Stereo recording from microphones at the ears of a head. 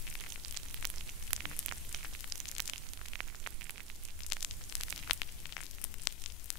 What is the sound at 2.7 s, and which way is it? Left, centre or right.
Static, right.